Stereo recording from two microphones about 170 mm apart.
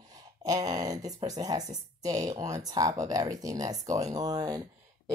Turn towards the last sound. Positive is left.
turn(degrees=-20)  # may be behind; listen again after turning